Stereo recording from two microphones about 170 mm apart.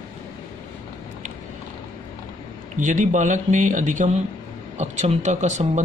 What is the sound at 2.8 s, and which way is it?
Speech, 45° right (ahead or behind).